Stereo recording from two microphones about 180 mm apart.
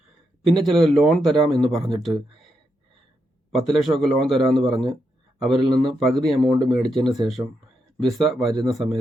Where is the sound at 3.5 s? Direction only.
Centre (ahead or behind).